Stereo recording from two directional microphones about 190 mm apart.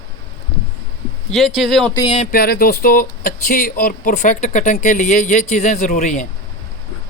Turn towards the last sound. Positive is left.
turn(degrees=40)  # may be behind; listen again after turning